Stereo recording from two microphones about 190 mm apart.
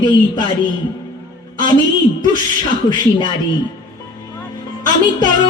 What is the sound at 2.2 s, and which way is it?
Speech, 20° left (ahead or behind).